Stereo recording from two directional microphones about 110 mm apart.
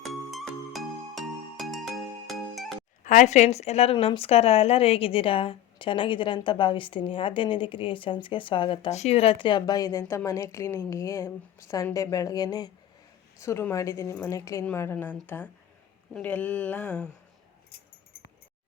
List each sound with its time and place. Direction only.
0.1 s music: centre (ahead or behind)
3.2 s a woman's voice: 90° left; by 3.9 s 75° left (ahead or behind)
3.9 s a woman's voice: 55° left (ahead or behind)
8.9 s a woman's voice: 80° left; by 10.0 s 35° left (ahead or behind)
10.1 s a woman's voice: 25° left (ahead or behind)
13.4 s a woman's voice: 25° left (ahead or behind); by 17.1 s 10° left (ahead or behind)